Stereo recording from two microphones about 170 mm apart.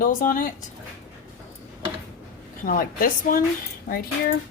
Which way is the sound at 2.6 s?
55° left (ahead or behind).